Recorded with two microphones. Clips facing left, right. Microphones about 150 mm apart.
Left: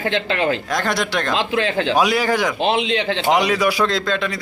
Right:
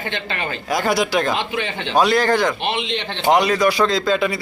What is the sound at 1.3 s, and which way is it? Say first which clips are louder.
Speech: left 4 dB; 90° left.